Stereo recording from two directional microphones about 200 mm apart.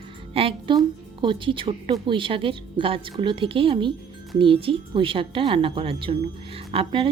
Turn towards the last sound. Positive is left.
turn(degrees=-25)  # may be behind; listen again after turning